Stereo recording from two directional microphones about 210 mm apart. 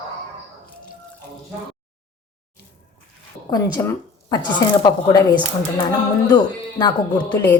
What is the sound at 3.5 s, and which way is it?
A woman's voice, 20° left (ahead or behind).